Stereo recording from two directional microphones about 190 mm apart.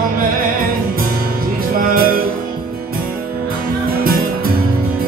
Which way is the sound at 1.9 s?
50° right (ahead or behind).